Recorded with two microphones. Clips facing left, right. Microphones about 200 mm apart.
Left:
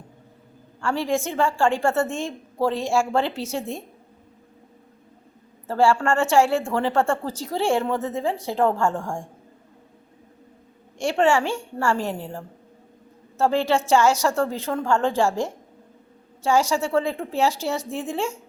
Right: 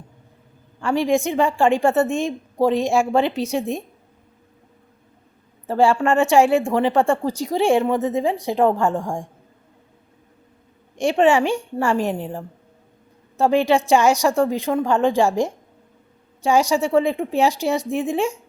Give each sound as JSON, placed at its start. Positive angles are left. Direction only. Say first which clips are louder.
{"t": 0.8, "sound": "speech", "louder": "right 5 dB", "side_deg": -15}
{"t": 5.6, "sound": "speech", "louder": "right 3 dB", "side_deg": -20}
{"t": 10.9, "sound": "speech", "louder": "right 4 dB", "side_deg": -20}